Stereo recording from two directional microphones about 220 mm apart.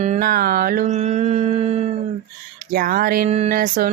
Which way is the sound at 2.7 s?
40° right (ahead or behind).